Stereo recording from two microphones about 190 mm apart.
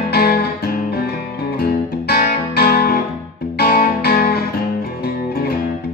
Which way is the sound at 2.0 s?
55° left (ahead or behind).